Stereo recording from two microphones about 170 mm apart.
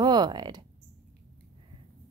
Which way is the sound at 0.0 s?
25° right (ahead or behind).